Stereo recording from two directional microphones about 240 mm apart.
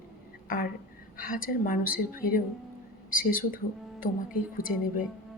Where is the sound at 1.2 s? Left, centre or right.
Left.